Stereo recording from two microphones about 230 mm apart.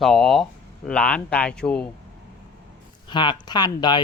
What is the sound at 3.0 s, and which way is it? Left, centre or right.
Speech, centre.